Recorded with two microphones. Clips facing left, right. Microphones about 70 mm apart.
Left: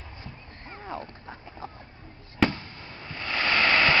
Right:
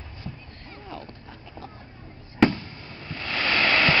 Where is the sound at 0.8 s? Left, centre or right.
Left.